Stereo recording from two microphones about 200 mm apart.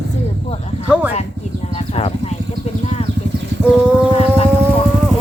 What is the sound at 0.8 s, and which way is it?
Speech, 5° right (ahead or behind).